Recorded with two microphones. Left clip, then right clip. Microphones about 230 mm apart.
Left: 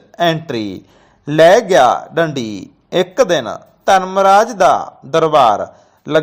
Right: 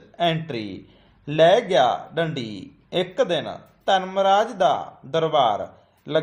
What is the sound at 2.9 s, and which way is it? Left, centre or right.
Speech, left.